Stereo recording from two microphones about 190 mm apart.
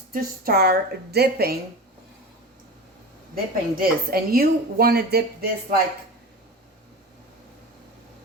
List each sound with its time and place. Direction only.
0.1 s a woman's voice: 55° right (ahead or behind)
3.3 s speech: 55° right (ahead or behind)